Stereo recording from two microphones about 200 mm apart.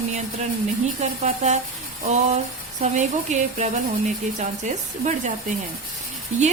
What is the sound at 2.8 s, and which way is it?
Speech, 35° right (ahead or behind).